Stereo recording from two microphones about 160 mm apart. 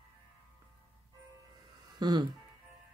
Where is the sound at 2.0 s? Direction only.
25° right (ahead or behind).